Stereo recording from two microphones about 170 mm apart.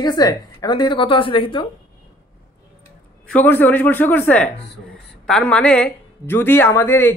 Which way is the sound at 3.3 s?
10° left (ahead or behind).